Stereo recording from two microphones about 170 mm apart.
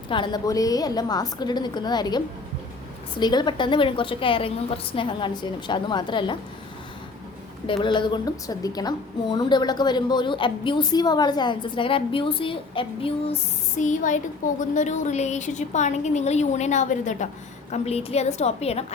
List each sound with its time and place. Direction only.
0.1 s a woman's voice: 25° left (ahead or behind)
7.7 s a woman's voice: 30° left (ahead or behind)